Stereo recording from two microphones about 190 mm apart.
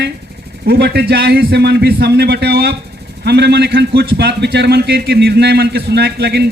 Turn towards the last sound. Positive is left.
turn(degrees=-60)  # may be behind; listen again after turning